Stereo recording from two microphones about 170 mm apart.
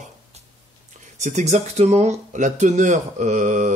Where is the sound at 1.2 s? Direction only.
45° right (ahead or behind).